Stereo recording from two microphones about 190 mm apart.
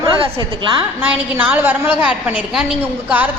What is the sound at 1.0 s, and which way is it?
A woman's voice, 10° right (ahead or behind).